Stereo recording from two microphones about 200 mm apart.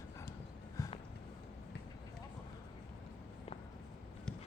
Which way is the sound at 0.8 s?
15° left (ahead or behind).